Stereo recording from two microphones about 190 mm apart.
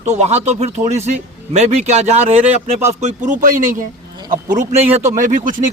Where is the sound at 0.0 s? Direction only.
35° right (ahead or behind).